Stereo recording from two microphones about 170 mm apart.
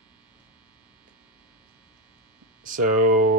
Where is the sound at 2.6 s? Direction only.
50° right (ahead or behind).